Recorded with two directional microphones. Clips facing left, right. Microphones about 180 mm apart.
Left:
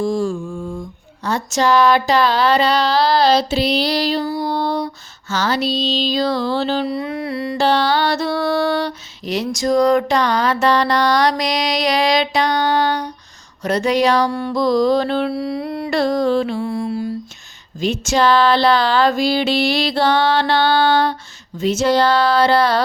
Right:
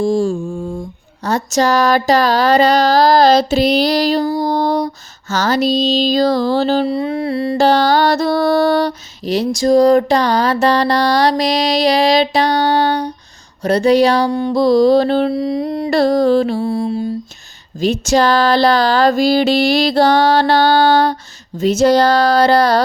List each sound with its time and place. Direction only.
0.0 s mantra: 25° right (ahead or behind)
1.2 s mantra: 40° right (ahead or behind)
5.3 s music: 45° right (ahead or behind)
6.8 s mantra: 30° right (ahead or behind)
14.6 s mantra: 30° right (ahead or behind)
15.3 s a sound: 20° right (ahead or behind)
15.9 s mantra: 35° right (ahead or behind)
17.7 s mantra: 35° right (ahead or behind)